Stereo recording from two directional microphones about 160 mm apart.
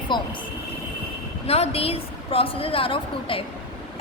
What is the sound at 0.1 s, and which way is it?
Speech, 30° left (ahead or behind).